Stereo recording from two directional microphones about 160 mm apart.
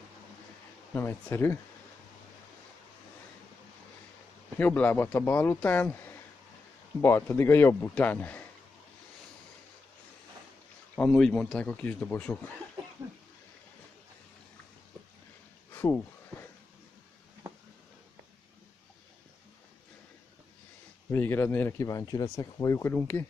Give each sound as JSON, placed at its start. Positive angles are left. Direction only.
{"t": 0.9, "sound": "speech", "side_deg": 15}
{"t": 4.6, "sound": "speech", "side_deg": 10}
{"t": 7.0, "sound": "speech", "side_deg": 15}
{"t": 11.0, "sound": "speech", "side_deg": 5}
{"t": 15.7, "sound": "a sound", "side_deg": 15}
{"t": 21.1, "sound": "speech", "side_deg": 15}